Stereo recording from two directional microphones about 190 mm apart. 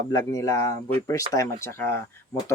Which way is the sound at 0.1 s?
20° left (ahead or behind).